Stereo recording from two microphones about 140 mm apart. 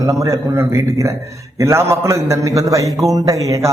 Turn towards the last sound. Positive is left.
turn(degrees=-25)  # may be behind; listen again after turning